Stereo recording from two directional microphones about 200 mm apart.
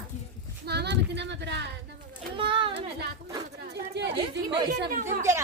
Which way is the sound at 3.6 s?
55° right (ahead or behind).